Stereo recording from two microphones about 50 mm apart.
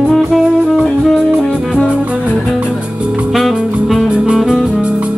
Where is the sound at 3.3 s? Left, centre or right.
Centre.